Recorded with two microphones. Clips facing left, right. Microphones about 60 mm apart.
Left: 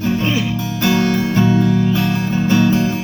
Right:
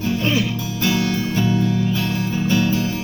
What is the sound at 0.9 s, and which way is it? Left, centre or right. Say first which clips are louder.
Music: left 5 dB; left.